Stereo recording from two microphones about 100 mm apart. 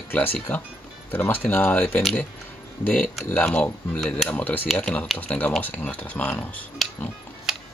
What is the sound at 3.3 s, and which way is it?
Speech, 15° left (ahead or behind).